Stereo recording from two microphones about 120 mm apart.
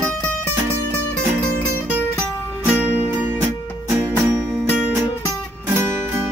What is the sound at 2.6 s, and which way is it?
Music, 10° right (ahead or behind).